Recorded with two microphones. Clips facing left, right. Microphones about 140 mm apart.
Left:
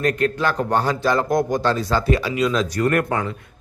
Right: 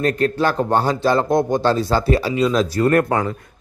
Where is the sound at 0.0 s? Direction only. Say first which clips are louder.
Right 2 dB; 30° right (ahead or behind).